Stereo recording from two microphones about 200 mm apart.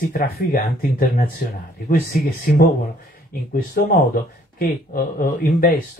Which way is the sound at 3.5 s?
45° left (ahead or behind).